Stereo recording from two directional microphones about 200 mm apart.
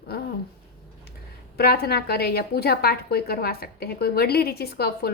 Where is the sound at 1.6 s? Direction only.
50° left (ahead or behind).